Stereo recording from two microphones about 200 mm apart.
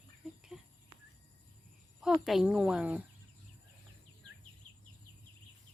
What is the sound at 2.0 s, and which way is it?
Speech, centre (ahead or behind).